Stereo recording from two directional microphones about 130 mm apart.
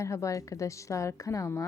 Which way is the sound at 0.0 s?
25° left (ahead or behind).